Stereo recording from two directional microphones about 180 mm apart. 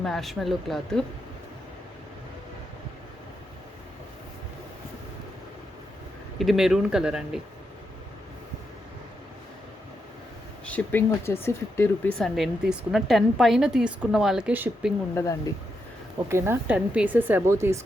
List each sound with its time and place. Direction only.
0.0 s a woman's voice: centre (ahead or behind)
6.4 s a woman's voice: centre (ahead or behind)
10.7 s speech: 10° left (ahead or behind)
12.2 s a woman's voice: centre (ahead or behind)
15.1 s speech: 15° left (ahead or behind)
16.3 s a woman's voice: 10° right (ahead or behind)